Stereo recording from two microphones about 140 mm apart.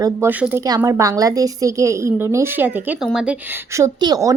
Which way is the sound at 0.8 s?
20° right (ahead or behind).